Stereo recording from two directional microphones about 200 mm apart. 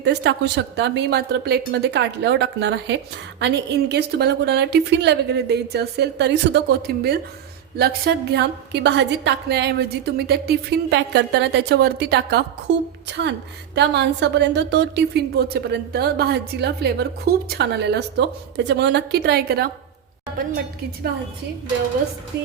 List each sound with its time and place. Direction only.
0.0 s a woman's voice: 60° right (ahead or behind)
22.3 s a woman's voice: 55° right (ahead or behind)